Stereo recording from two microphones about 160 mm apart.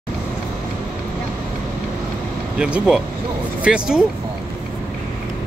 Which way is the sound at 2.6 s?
5° right (ahead or behind).